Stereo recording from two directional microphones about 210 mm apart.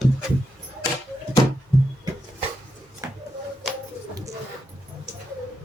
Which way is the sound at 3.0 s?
15° right (ahead or behind).